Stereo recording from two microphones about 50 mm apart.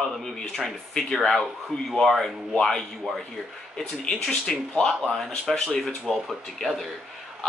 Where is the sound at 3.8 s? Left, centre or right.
Centre.